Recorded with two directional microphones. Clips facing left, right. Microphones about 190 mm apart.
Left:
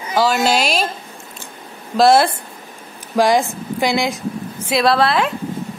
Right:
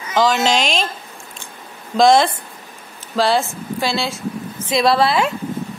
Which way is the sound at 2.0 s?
5° left (ahead or behind).